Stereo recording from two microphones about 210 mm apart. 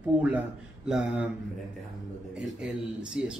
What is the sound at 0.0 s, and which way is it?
A man's voice, 5° right (ahead or behind).